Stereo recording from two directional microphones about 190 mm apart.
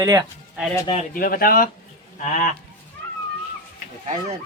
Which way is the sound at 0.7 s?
15° left (ahead or behind).